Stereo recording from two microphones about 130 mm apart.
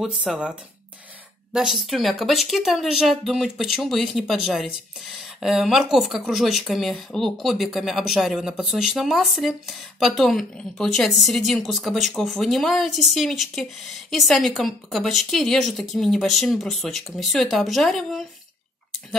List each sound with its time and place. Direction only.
0.0 s speech: 5° right (ahead or behind)